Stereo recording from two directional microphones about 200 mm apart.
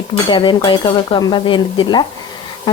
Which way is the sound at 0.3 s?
20° left (ahead or behind).